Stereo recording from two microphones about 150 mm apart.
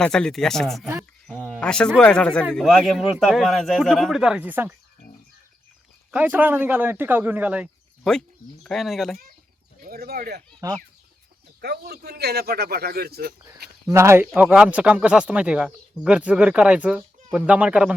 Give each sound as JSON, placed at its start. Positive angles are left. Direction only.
{"t": 0.0, "sound": "speech", "side_deg": 5}
{"t": 1.4, "sound": "a sound", "side_deg": 0}
{"t": 2.0, "sound": "speech", "side_deg": 5}
{"t": 6.1, "sound": "speech", "side_deg": -10}
{"t": 8.6, "sound": "speech", "side_deg": 0}
{"t": 9.8, "sound": "speech", "side_deg": -90}
{"t": 10.6, "sound": "speech", "side_deg": -25}
{"t": 11.6, "sound": "a man's voice", "side_deg": -90}
{"t": 13.8, "sound": "speech", "side_deg": -15}
{"t": 14.3, "sound": "speech", "side_deg": -5}